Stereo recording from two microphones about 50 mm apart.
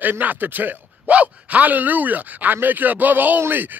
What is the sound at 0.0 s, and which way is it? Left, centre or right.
Speech, right.